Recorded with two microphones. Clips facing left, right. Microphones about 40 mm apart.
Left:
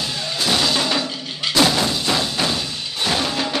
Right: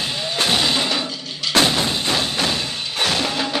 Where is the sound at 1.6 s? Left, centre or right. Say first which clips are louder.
Left 1 dB; right.